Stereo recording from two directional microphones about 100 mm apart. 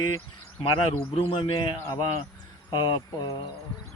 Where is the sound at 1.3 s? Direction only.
55° left (ahead or behind).